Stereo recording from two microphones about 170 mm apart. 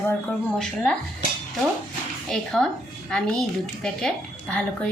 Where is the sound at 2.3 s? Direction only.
5° left (ahead or behind).